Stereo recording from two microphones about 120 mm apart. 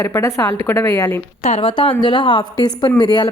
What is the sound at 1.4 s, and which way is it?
Speech, 65° left (ahead or behind).